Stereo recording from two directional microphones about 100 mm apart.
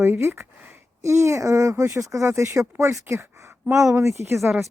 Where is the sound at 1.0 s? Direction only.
30° right (ahead or behind).